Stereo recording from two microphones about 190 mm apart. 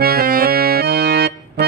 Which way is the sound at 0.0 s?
50° right (ahead or behind).